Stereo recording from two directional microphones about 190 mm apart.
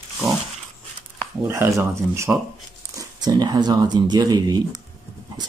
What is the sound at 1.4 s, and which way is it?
Speech, 15° right (ahead or behind).